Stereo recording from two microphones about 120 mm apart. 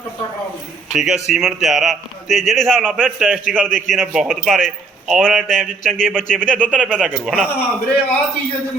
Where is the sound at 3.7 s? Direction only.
90° left.